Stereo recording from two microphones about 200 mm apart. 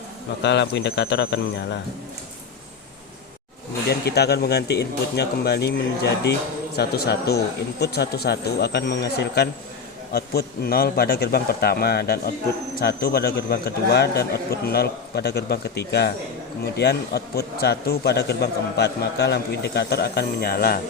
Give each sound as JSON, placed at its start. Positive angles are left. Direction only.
{"t": 0.4, "sound": "speech", "side_deg": 60}
{"t": 4.0, "sound": "a man's voice", "side_deg": 55}